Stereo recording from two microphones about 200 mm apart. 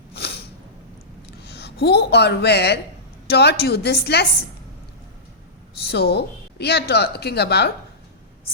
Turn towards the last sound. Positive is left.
turn(degrees=55)  # may be behind; listen again after turning